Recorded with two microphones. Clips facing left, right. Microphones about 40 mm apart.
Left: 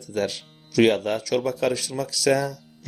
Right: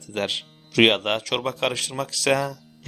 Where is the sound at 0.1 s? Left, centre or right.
Right.